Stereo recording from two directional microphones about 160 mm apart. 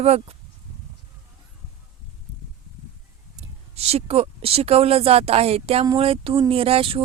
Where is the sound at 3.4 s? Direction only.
40° right (ahead or behind).